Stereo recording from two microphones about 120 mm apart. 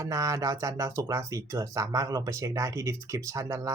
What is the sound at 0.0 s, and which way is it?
Speech, 25° right (ahead or behind).